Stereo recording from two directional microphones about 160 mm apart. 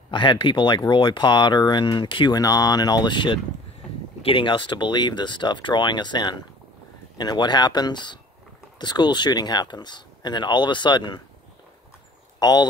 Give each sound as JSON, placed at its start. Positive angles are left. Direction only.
{"t": 0.1, "sound": "speech", "side_deg": 30}
{"t": 12.4, "sound": "speech", "side_deg": 25}